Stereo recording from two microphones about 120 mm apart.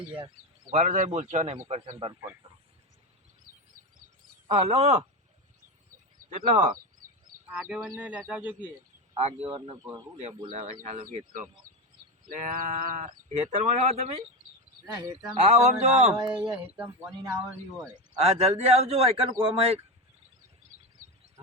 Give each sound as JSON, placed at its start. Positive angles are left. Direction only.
{"t": 0.7, "sound": "a man's voice", "side_deg": -80}
{"t": 4.6, "sound": "speech", "side_deg": -60}
{"t": 6.3, "sound": "speech", "side_deg": -75}
{"t": 7.5, "sound": "speech", "side_deg": -10}
{"t": 9.1, "sound": "speech", "side_deg": -55}
{"t": 12.3, "sound": "speech", "side_deg": -90}
{"t": 14.9, "sound": "speech", "side_deg": -30}
{"t": 15.4, "sound": "speech", "side_deg": -70}
{"t": 16.1, "sound": "speech", "side_deg": -40}
{"t": 16.4, "sound": "speech", "side_deg": -10}
{"t": 18.2, "sound": "speech", "side_deg": -60}